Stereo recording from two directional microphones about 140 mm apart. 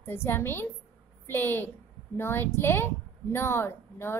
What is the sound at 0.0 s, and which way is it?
A woman's voice, 15° left (ahead or behind).